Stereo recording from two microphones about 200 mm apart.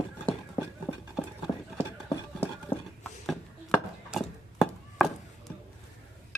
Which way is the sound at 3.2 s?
Centre (ahead or behind).